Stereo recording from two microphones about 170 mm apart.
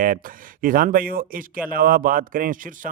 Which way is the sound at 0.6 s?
55° right (ahead or behind).